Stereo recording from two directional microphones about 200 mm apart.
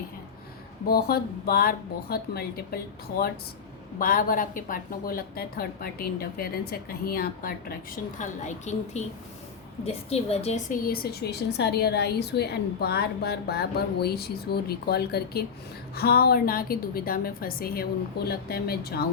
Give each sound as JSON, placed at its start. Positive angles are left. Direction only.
{"t": 0.9, "sound": "a woman's voice", "side_deg": 50}
{"t": 8.2, "sound": "a woman's voice", "side_deg": 35}